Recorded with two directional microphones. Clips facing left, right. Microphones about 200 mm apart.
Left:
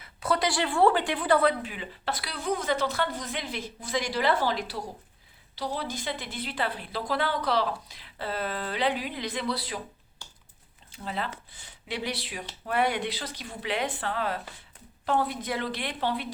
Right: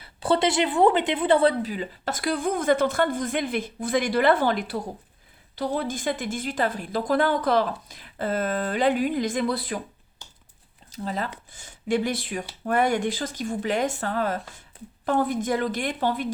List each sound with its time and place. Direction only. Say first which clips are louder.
0.0 s speech: right 5 dB; 30° right (ahead or behind); by 9.8 s 50° right (ahead or behind)
10.2 s a sound: even; 15° right (ahead or behind)
10.9 s speech: right 4 dB; 40° right (ahead or behind)